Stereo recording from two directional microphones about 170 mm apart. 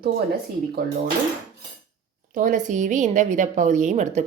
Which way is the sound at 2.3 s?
50° right (ahead or behind).